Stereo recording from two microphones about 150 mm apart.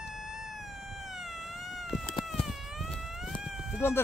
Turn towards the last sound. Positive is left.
turn(degrees=-5)  # may be behind; listen again after turning